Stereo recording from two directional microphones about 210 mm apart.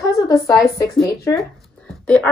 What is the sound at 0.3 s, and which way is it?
Speech, 15° left (ahead or behind).